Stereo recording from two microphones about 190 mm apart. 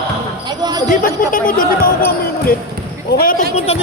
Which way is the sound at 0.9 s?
45° left (ahead or behind).